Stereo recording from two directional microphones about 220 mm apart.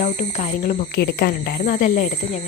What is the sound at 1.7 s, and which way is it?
Speech, 35° left (ahead or behind).